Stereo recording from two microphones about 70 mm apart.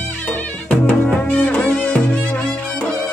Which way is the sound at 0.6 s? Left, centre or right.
Centre.